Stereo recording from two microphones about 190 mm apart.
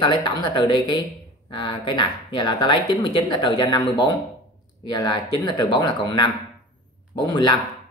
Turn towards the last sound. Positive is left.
turn(degrees=25)  # may be behind; listen again after turning